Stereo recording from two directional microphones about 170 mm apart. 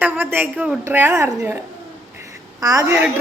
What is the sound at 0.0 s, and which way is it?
A woman's voice, 10° right (ahead or behind).